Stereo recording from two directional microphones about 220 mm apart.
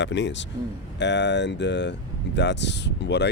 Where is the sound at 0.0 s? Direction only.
55° left (ahead or behind).